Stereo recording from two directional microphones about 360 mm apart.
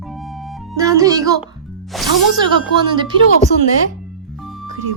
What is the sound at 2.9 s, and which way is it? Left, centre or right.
Speech, centre.